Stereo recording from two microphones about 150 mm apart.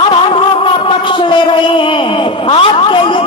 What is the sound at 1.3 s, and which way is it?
A man's voice, 30° left (ahead or behind).